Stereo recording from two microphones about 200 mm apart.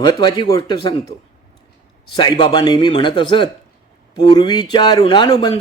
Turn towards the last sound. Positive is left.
turn(degrees=20)  # may be behind; listen again after turning